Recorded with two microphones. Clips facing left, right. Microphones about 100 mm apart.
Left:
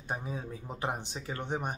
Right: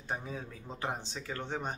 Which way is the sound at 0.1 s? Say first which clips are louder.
Left 2 dB; 15° left (ahead or behind).